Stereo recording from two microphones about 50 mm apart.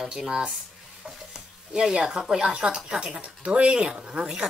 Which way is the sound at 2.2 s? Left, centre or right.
Centre.